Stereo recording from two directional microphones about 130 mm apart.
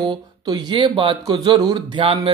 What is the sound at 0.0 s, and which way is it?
Speech, 35° right (ahead or behind).